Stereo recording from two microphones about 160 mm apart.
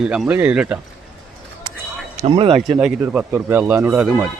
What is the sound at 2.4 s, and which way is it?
Speech, 35° right (ahead or behind).